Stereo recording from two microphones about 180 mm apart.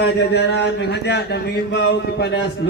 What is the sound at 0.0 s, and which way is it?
A man's voice, 70° left (ahead or behind).